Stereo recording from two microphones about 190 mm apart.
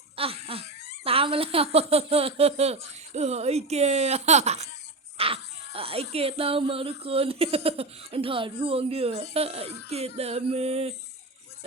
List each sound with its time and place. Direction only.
0.2 s laughter: 30° right (ahead or behind)
1.0 s speech: 30° right (ahead or behind)
5.1 s a sound: 30° right (ahead or behind)
5.7 s speech: 30° right (ahead or behind)